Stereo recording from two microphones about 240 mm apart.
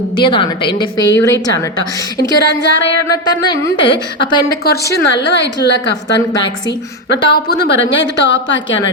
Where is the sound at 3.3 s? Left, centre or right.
Centre.